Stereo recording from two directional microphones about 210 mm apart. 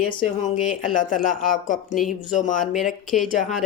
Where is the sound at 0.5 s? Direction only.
40° left (ahead or behind).